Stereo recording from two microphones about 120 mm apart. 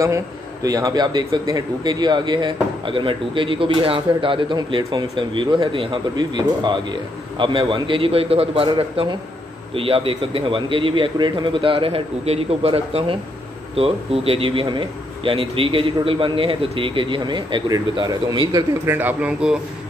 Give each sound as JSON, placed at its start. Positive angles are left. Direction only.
{"t": 0.7, "sound": "speech", "side_deg": -30}
{"t": 18.9, "sound": "speech", "side_deg": -15}